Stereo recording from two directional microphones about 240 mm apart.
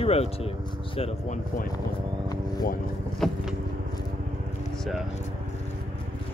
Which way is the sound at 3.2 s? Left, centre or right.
Centre.